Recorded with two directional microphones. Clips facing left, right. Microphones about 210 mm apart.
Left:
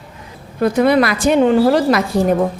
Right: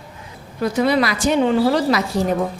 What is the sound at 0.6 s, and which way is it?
A woman's voice, 55° left (ahead or behind).